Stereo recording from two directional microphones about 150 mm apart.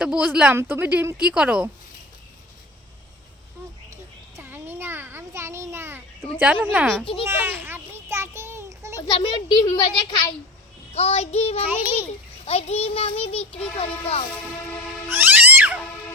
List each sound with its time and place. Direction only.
0.0 s speech: 5° right (ahead or behind)
4.4 s a sound: 15° right (ahead or behind)
6.4 s speech: 10° right (ahead or behind)
7.0 s a child's voice: 35° left (ahead or behind)
7.3 s a sound: 15° right (ahead or behind)
9.1 s a child's voice: 30° left (ahead or behind)
10.9 s child singing: 45° left (ahead or behind)
12.5 s a child's voice: 45° left (ahead or behind)
15.1 s cat: 10° right (ahead or behind)